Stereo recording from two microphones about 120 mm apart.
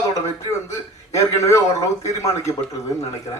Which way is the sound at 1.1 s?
25° left (ahead or behind).